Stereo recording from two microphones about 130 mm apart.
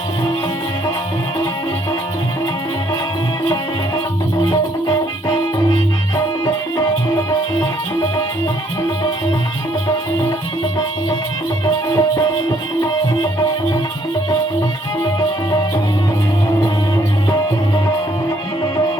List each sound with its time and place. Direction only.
11.9 s music: 25° left (ahead or behind)
18.3 s music: 25° left (ahead or behind)